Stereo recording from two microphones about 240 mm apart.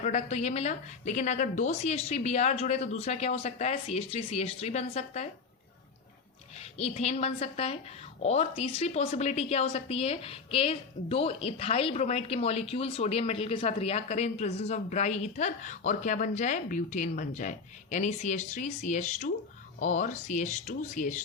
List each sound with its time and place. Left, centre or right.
0.0 s a woman's voice: left
6.6 s a woman's voice: left